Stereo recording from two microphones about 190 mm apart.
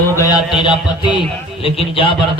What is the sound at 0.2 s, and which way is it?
A man's voice, 20° left (ahead or behind).